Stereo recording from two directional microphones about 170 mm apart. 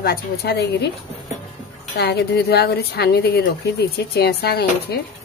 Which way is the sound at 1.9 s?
75° left (ahead or behind).